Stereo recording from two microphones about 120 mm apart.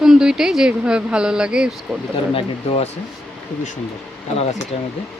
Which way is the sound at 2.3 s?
55° left (ahead or behind).